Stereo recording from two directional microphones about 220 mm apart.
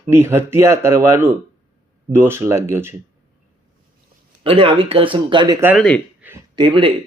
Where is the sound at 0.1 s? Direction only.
10° right (ahead or behind).